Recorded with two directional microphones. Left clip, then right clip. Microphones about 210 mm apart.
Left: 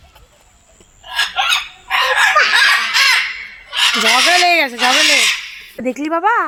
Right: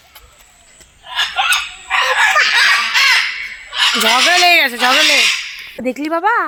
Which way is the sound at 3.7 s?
20° left (ahead or behind).